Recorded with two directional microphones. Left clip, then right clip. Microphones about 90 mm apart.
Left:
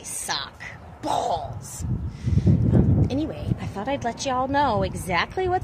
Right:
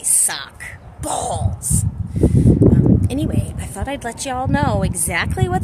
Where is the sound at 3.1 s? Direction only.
30° right (ahead or behind).